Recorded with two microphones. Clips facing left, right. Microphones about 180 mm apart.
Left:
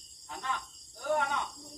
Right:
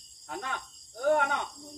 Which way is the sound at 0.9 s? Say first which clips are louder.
Right 5 dB; 60° right (ahead or behind).